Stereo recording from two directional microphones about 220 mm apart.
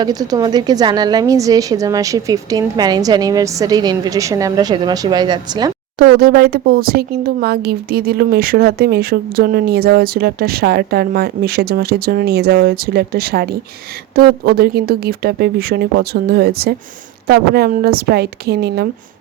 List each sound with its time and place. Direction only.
0.0 s a woman's voice: 15° right (ahead or behind)
6.0 s speech: 45° right (ahead or behind)